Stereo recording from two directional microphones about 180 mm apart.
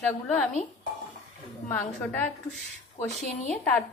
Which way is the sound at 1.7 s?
10° left (ahead or behind).